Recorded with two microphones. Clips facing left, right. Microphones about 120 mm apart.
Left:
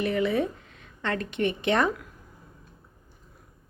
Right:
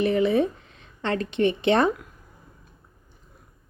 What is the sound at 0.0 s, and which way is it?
Speech, 25° right (ahead or behind).